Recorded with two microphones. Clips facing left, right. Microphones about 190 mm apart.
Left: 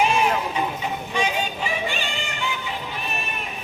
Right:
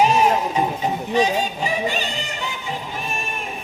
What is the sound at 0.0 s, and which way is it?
Music, 40° right (ahead or behind).